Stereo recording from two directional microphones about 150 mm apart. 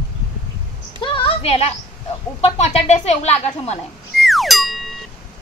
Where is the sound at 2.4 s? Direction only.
45° left (ahead or behind).